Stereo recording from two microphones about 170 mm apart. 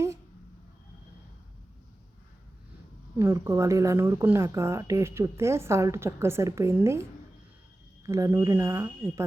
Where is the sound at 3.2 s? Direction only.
15° right (ahead or behind).